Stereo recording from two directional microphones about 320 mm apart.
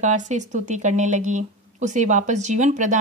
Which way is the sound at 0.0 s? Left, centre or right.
Right.